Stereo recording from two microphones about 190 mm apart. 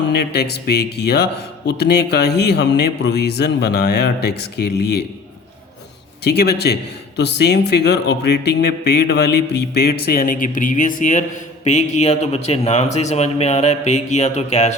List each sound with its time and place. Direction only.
0.3 s a man's voice: 55° left (ahead or behind)
6.2 s a man's voice: 55° left (ahead or behind); by 14.8 s 35° left (ahead or behind)